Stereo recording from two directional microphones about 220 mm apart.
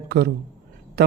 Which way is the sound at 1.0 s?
45° right (ahead or behind).